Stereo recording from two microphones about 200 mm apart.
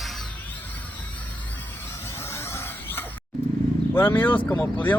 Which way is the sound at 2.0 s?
15° left (ahead or behind).